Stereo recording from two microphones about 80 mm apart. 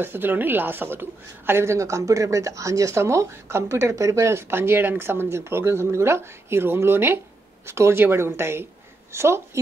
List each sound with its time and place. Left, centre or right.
0.0 s a woman's voice: right